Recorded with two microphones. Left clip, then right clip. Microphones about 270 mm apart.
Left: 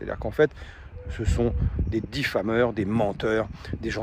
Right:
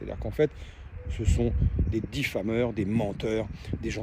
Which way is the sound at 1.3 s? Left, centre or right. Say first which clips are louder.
Left 4 dB; centre.